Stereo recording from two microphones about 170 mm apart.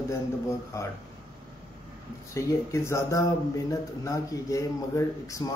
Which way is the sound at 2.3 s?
15° left (ahead or behind).